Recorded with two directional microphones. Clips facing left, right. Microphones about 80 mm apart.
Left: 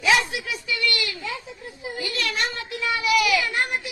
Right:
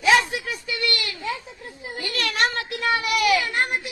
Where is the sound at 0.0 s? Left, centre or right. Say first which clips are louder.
Right 2 dB; right.